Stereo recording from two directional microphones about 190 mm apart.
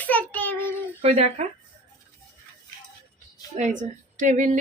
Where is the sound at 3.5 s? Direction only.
40° right (ahead or behind).